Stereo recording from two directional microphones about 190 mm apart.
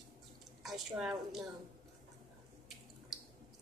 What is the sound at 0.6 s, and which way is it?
Speech, centre (ahead or behind).